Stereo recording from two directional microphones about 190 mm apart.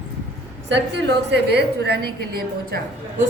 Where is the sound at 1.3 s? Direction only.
60° right (ahead or behind).